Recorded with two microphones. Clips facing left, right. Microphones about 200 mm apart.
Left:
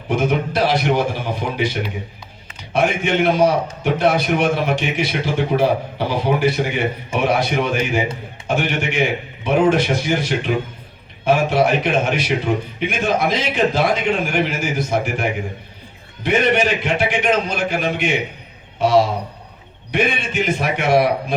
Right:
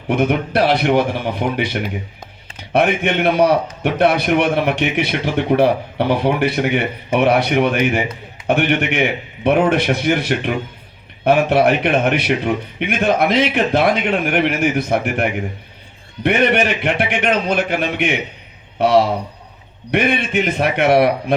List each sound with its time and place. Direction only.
0.1 s a man's voice: 60° right (ahead or behind)